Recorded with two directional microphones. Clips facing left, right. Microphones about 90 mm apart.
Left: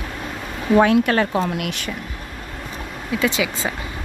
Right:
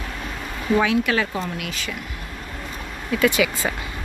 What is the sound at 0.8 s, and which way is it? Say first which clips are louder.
Speech: left 6 dB; 45° left (ahead or behind).